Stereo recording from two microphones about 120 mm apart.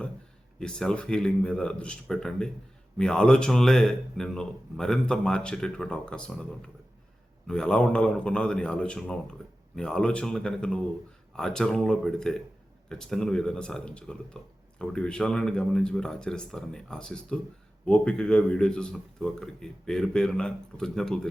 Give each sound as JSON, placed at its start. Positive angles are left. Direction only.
{"t": 0.6, "sound": "a man's voice", "side_deg": 5}